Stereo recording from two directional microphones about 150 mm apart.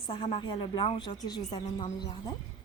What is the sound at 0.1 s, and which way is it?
Speech, 35° left (ahead or behind).